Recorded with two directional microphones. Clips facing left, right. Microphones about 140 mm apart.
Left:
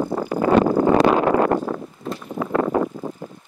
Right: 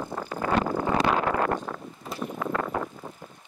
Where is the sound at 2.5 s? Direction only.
30° left (ahead or behind).